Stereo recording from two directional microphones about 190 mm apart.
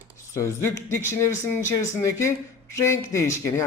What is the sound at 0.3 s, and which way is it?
Speech, 15° left (ahead or behind).